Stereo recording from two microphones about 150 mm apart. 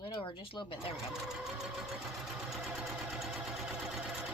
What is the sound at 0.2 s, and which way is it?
Speech, 35° left (ahead or behind).